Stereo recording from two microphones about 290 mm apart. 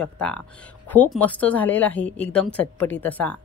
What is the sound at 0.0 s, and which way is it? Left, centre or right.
Speech, centre.